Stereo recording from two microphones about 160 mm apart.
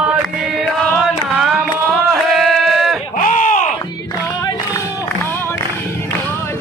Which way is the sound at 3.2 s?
55° left (ahead or behind).